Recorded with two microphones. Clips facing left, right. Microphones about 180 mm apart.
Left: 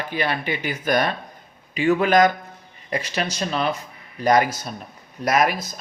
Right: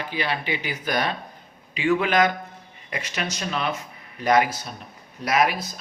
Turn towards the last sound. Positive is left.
turn(degrees=45)  # may be behind; listen again after turning